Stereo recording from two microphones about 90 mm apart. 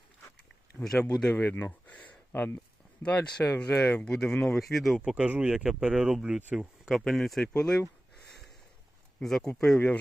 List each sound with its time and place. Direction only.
0.8 s speech: 5° left (ahead or behind)
1.9 s a sound: 15° left (ahead or behind)
2.3 s speech: 25° left (ahead or behind)
3.0 s speech: 10° left (ahead or behind)
5.0 s speech: 15° right (ahead or behind); by 7.8 s 10° left (ahead or behind)
9.2 s speech: 5° left (ahead or behind)